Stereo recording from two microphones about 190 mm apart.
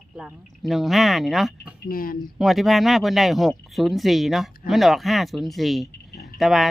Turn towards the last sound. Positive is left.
turn(degrees=0)  # may be behind; listen again after turning